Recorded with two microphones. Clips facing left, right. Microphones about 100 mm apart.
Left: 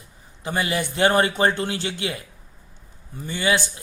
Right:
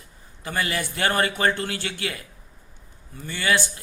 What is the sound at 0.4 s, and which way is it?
A man's voice, 20° left (ahead or behind).